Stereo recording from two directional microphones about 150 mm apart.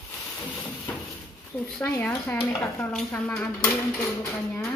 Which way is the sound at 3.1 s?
10° left (ahead or behind).